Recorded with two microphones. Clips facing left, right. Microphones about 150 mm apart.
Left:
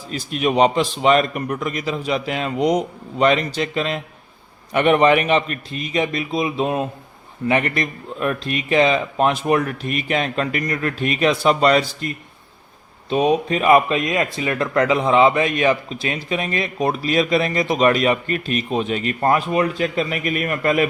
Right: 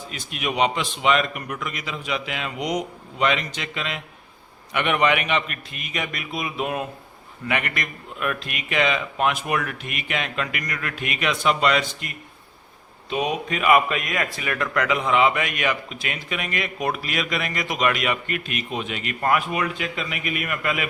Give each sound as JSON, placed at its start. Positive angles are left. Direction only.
{"t": 0.1, "sound": "speech", "side_deg": 35}